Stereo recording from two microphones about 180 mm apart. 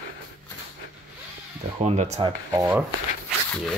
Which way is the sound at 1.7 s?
40° right (ahead or behind).